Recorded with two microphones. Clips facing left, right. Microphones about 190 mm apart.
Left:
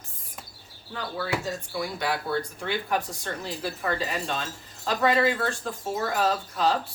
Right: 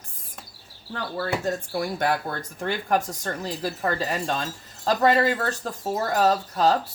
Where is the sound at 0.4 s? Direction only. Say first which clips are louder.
Even; centre (ahead or behind).